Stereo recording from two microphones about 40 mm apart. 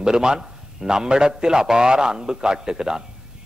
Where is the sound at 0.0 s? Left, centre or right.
Centre.